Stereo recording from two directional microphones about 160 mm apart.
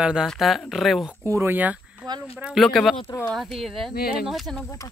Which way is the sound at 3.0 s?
20° left (ahead or behind).